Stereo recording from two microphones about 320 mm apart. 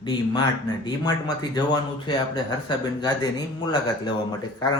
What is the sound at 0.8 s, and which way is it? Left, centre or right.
Speech, centre.